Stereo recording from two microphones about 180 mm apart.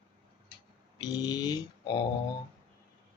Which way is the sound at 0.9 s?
20° left (ahead or behind).